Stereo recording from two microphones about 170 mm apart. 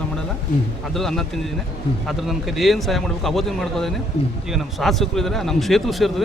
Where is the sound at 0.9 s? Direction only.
Centre (ahead or behind).